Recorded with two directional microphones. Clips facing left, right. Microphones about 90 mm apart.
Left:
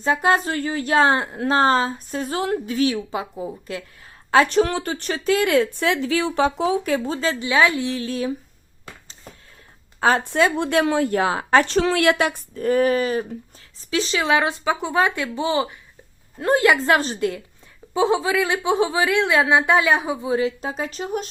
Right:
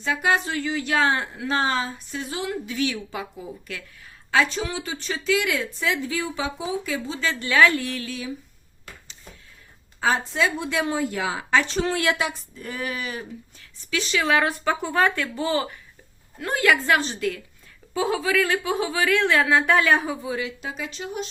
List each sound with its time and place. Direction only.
0.0 s a woman's voice: 35° left (ahead or behind)
4.4 s speech: 60° left (ahead or behind)
7.3 s a woman's voice: 20° left (ahead or behind)
10.0 s speech: 60° left (ahead or behind); by 14.3 s 35° left (ahead or behind)
14.3 s a woman's voice: 20° left (ahead or behind)
16.4 s a woman's voice: 30° left (ahead or behind)
17.0 s speech: 40° left (ahead or behind)
17.9 s a woman's voice: 25° left (ahead or behind)
20.3 s speech: 35° left (ahead or behind)